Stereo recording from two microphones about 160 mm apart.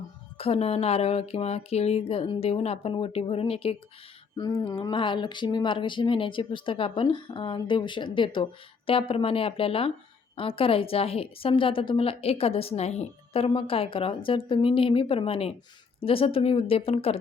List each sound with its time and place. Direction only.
0.3 s a woman's voice: 40° left (ahead or behind)
4.4 s a woman's voice: 25° left (ahead or behind)